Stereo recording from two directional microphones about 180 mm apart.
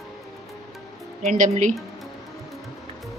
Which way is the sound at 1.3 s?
45° right (ahead or behind).